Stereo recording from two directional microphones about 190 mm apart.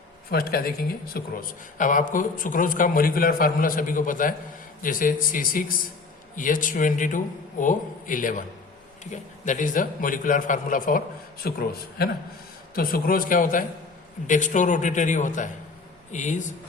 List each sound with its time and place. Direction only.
0.3 s speech: 55° left (ahead or behind)
12.7 s speech: 50° left (ahead or behind)